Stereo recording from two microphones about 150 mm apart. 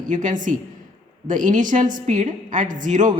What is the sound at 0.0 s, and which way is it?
Speech, 60° right (ahead or behind).